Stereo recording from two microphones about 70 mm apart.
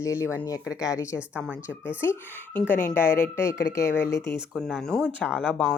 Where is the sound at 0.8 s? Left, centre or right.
Left.